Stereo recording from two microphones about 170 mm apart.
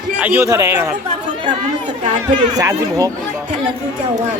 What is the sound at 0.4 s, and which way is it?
Speech, 20° right (ahead or behind).